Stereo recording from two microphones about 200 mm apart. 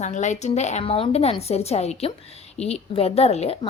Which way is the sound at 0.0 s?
35° left (ahead or behind).